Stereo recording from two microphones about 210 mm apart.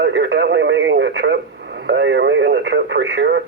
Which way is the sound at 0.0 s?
55° right (ahead or behind).